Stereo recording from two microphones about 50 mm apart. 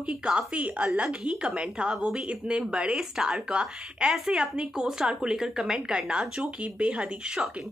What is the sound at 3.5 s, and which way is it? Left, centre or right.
A woman's voice, centre.